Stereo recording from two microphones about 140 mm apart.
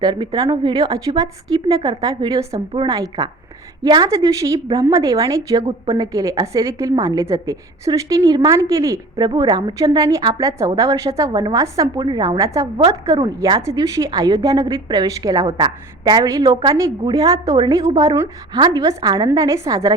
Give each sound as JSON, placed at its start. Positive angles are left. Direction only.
{"t": 0.0, "sound": "a woman's voice", "side_deg": -30}
{"t": 13.6, "sound": "a woman's voice", "side_deg": -20}